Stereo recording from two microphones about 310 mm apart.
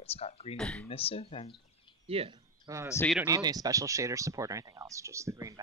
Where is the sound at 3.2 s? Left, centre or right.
Centre.